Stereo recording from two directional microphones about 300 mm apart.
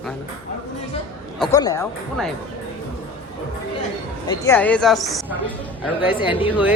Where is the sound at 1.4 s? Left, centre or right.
Centre.